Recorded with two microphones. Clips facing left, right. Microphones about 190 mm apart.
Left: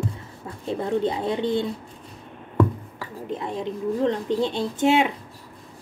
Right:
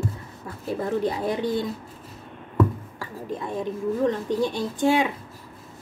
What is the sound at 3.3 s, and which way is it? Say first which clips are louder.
Speech: even; 20° left (ahead or behind).